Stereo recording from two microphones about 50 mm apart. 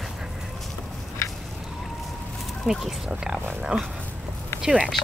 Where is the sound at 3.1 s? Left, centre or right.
Centre.